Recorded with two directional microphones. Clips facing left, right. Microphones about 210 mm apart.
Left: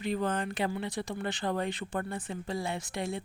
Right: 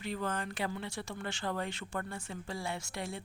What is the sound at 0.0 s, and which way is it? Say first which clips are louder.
Speech: left 6 dB; 20° left (ahead or behind).